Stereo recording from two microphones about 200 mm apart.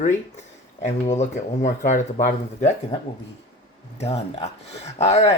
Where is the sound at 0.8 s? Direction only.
35° left (ahead or behind).